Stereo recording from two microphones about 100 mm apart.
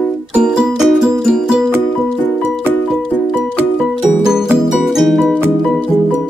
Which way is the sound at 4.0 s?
5° right (ahead or behind).